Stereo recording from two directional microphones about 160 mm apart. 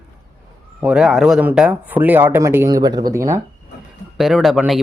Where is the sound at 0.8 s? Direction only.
5° right (ahead or behind).